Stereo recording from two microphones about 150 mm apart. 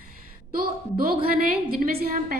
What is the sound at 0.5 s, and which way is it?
Speech, 80° right.